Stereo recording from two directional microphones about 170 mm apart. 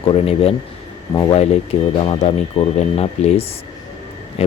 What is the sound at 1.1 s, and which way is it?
Speech, 20° left (ahead or behind).